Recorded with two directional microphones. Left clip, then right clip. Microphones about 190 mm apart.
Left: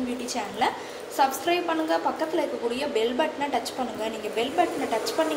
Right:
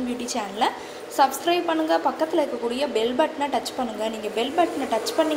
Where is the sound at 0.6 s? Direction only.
30° right (ahead or behind).